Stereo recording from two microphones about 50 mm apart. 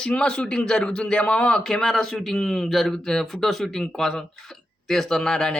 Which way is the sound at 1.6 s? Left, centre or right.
Centre.